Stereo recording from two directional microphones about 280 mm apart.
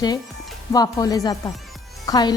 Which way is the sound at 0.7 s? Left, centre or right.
Centre.